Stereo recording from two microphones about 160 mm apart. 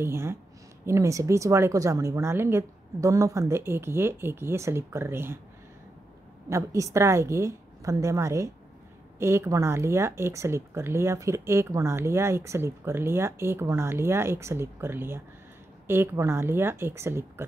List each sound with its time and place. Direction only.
0.0 s speech: 15° right (ahead or behind)
6.5 s a woman's voice: 20° right (ahead or behind)